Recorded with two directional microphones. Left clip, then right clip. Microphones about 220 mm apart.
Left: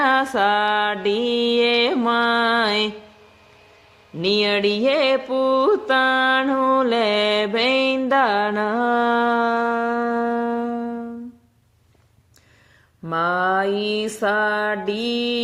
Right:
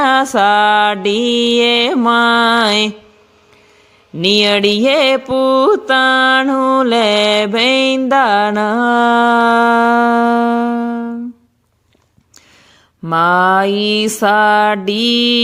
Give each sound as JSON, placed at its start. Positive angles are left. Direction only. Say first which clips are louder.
{"t": 0.0, "sound": "music", "louder": "right 6 dB", "side_deg": -35}
{"t": 4.2, "sound": "music", "louder": "right 7 dB", "side_deg": -35}
{"t": 13.0, "sound": "a sound", "louder": "right 9 dB", "side_deg": -45}